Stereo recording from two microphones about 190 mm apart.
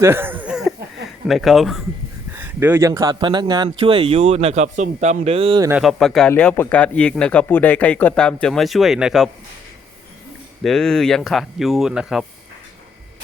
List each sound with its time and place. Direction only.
0.0 s a sound: 10° right (ahead or behind)
1.3 s speech: centre (ahead or behind); by 5.6 s 30° right (ahead or behind)
5.8 s speech: centre (ahead or behind)
10.6 s speech: centre (ahead or behind)